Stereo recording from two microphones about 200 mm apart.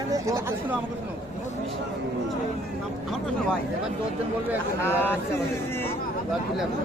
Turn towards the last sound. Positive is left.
turn(degrees=10)  # may be behind; listen again after turning